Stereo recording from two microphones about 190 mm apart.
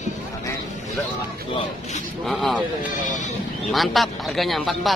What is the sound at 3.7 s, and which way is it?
Speech, centre (ahead or behind).